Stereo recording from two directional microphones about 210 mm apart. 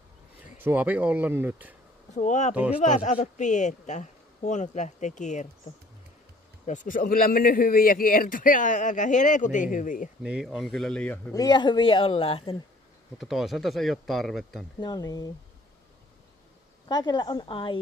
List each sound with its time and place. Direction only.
0.6 s speech: 10° right (ahead or behind)
2.1 s speech: 35° left (ahead or behind)
2.5 s speech: 5° right (ahead or behind)
2.8 s speech: 35° left (ahead or behind)
6.6 s speech: 35° left (ahead or behind)
10.2 s speech: 5° right (ahead or behind)
11.3 s a man's voice: 20° left (ahead or behind)
13.2 s speech: centre (ahead or behind)
14.8 s speech: 20° left (ahead or behind)
16.8 s a man's voice: 20° left (ahead or behind)